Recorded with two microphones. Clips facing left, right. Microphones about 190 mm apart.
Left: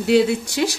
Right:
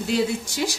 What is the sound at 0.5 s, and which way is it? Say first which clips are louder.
Speech: left 5 dB; 65° left (ahead or behind).